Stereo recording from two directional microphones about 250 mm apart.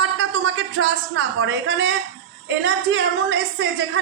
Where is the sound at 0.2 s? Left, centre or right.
Right.